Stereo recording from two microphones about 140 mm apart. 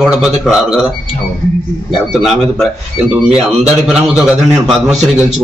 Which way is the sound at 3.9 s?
Centre (ahead or behind).